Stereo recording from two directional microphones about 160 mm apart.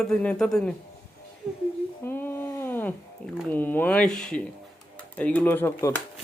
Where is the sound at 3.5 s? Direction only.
10° left (ahead or behind).